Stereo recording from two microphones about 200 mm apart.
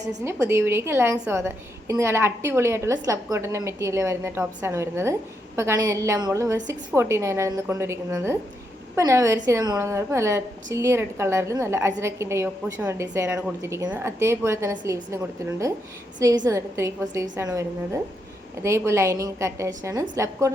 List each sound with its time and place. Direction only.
0.1 s a woman's voice: 15° right (ahead or behind)